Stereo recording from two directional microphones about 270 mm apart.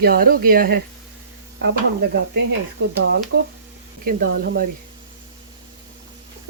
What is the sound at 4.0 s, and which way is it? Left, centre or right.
Speech, right.